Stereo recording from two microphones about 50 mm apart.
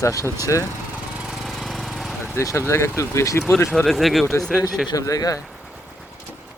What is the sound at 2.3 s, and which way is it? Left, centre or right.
Speech, left.